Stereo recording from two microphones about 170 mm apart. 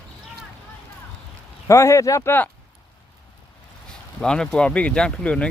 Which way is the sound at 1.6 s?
15° left (ahead or behind).